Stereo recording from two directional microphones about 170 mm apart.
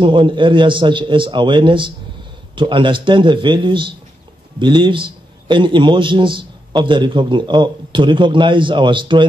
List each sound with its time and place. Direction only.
0.0 s a man's voice: 30° right (ahead or behind)